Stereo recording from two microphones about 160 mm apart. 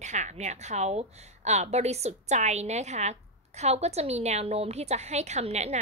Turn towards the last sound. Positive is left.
turn(degrees=-45)  # may be behind; listen again after turning